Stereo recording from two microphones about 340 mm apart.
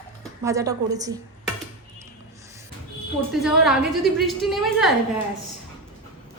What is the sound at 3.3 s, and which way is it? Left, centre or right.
A woman's voice, centre.